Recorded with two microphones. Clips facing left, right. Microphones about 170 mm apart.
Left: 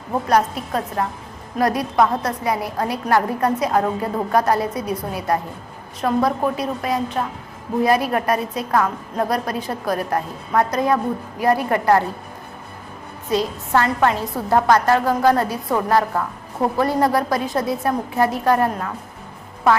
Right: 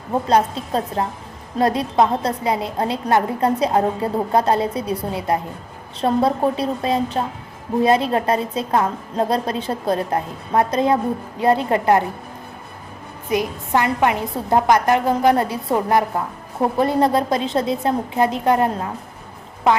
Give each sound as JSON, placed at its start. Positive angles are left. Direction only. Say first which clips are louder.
{"t": 0.1, "sound": "a woman's voice", "louder": "right 1 dB", "side_deg": -25}
{"t": 13.3, "sound": "a woman's voice", "louder": "even", "side_deg": -15}